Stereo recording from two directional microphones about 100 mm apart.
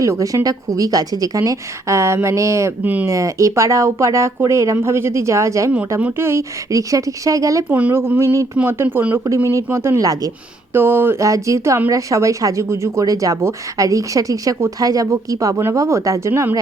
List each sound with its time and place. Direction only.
0.0 s speech: 35° right (ahead or behind)
2.8 s speech: 15° right (ahead or behind)
3.1 s speech: 35° right (ahead or behind)
6.0 s speech: 15° right (ahead or behind)
6.2 s speech: 30° right (ahead or behind)
7.7 s speech: 15° right (ahead or behind)
9.2 s speech: 30° right (ahead or behind)
10.8 s speech: 25° right (ahead or behind)